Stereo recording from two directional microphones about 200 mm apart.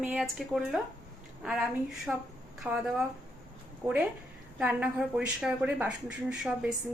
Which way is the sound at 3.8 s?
20° right (ahead or behind).